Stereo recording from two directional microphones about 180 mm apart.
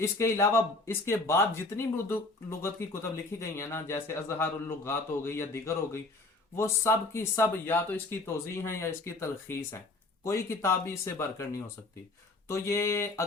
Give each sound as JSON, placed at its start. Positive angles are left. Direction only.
{"t": 0.0, "sound": "speech", "side_deg": 15}